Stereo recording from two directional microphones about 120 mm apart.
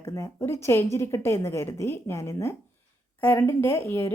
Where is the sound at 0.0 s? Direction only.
20° left (ahead or behind).